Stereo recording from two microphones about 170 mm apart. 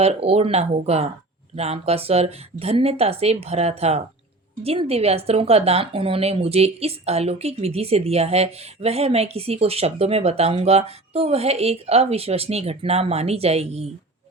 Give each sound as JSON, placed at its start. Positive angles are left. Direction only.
{"t": 0.0, "sound": "speech", "side_deg": -35}